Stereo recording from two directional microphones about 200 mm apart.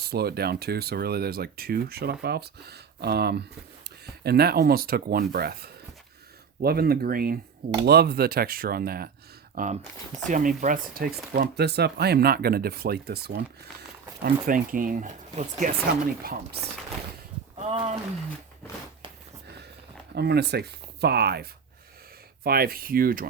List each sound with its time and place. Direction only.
0.0 s speech: 50° right (ahead or behind)
16.2 s speech: 50° right (ahead or behind)
17.7 s speech: 30° right (ahead or behind)
20.1 s speech: 55° right (ahead or behind)